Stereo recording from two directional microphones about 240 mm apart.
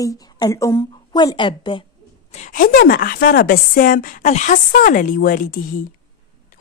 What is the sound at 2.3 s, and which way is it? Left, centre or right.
A woman's voice, left.